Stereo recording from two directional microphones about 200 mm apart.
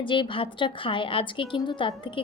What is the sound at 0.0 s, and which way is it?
Speech, 25° left (ahead or behind).